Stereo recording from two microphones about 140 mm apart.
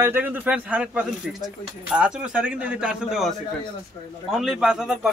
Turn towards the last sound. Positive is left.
turn(degrees=-5)  # may be behind; listen again after turning